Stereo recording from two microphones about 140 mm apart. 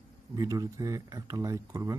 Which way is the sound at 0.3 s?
25° right (ahead or behind).